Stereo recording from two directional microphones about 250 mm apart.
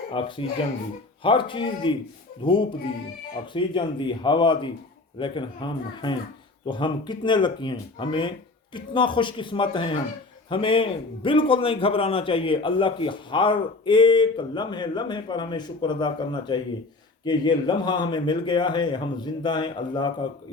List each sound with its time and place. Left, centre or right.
0.1 s a man's voice: left